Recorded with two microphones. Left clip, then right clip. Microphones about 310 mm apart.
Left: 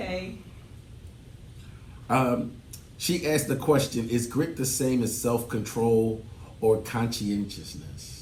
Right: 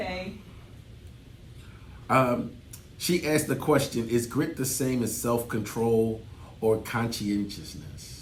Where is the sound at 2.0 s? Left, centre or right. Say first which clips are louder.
Right 1 dB; centre.